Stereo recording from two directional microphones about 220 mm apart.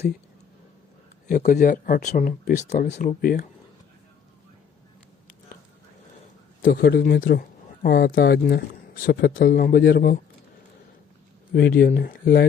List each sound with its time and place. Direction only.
1.3 s speech: 35° left (ahead or behind)
6.6 s a man's voice: 45° left (ahead or behind)
11.5 s a man's voice: 45° left (ahead or behind)